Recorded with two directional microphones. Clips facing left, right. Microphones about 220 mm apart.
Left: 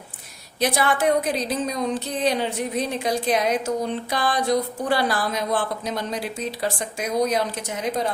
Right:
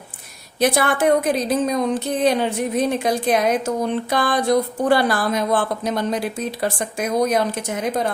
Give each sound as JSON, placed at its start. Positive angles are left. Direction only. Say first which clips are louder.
{"t": 0.6, "sound": "speech", "louder": "right 3 dB", "side_deg": -50}